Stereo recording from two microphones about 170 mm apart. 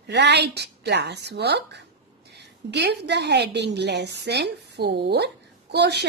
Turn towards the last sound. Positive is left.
turn(degrees=-80)